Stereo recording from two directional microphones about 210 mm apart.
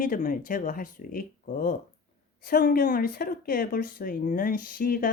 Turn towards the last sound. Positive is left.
turn(degrees=45)  # may be behind; listen again after turning